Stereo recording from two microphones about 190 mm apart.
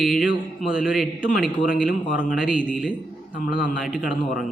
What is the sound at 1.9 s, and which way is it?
Speech, 45° left (ahead or behind).